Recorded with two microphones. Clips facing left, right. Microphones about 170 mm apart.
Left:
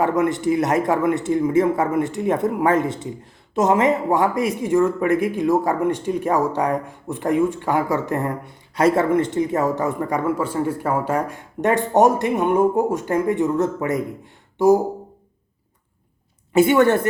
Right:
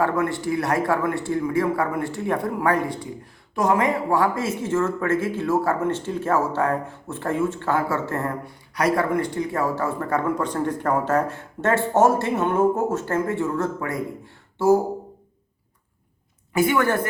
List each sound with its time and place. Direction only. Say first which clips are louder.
0.0 s speech: left 4 dB; 20° left (ahead or behind)
16.5 s a woman's voice: left 5 dB; 25° left (ahead or behind)